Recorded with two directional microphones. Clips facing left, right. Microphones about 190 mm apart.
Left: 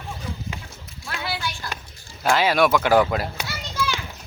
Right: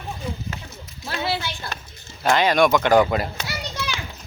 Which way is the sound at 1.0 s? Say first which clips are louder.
Right 4 dB; 25° right (ahead or behind).